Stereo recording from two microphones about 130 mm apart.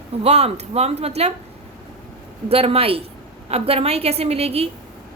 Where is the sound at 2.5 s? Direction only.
50° right (ahead or behind).